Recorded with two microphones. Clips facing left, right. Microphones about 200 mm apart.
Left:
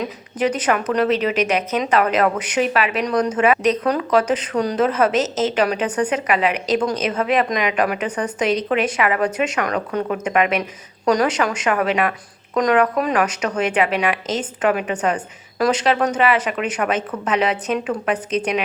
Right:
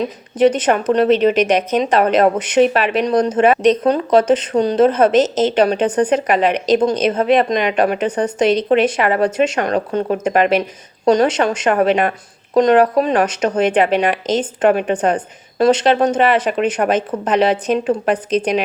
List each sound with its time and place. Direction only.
0.0 s a woman's voice: 30° right (ahead or behind)